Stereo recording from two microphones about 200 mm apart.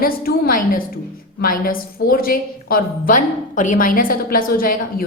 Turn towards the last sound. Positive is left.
turn(degrees=45)  # may be behind; listen again after turning